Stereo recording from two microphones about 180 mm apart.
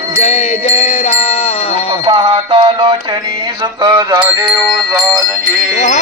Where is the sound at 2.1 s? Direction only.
30° right (ahead or behind).